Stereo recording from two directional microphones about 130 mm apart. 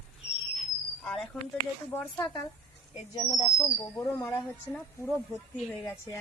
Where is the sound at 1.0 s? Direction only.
5° left (ahead or behind).